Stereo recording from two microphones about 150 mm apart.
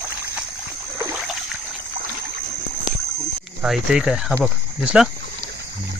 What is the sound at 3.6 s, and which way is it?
Speech, 5° right (ahead or behind).